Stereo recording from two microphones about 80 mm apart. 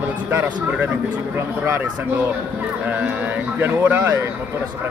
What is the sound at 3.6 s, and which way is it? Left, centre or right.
Speech, right.